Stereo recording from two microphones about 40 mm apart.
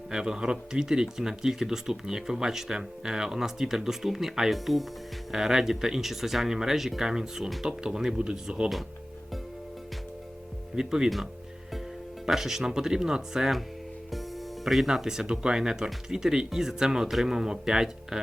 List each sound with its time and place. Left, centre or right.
0.1 s speech: centre
8.2 s speech: right
10.8 s speech: centre
12.2 s speech: centre
14.1 s speech: centre